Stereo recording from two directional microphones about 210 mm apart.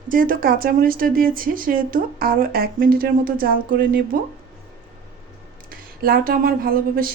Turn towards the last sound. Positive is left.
turn(degrees=-45)  # may be behind; listen again after turning